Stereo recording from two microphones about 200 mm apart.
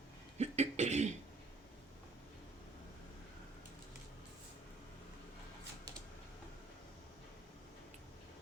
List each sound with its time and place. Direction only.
0.3 s cough: 35° right (ahead or behind)